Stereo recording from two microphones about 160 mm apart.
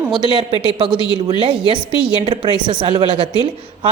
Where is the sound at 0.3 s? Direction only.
35° right (ahead or behind).